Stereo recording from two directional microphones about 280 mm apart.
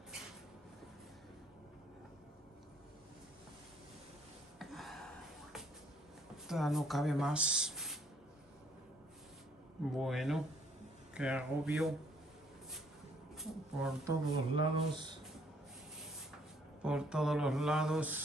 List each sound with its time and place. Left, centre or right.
4.6 s a sound: centre
6.3 s speech: centre
9.9 s speech: centre
13.4 s speech: centre
14.5 s speech: centre
16.8 s speech: centre